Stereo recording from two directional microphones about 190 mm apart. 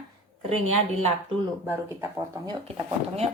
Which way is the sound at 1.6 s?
15° right (ahead or behind).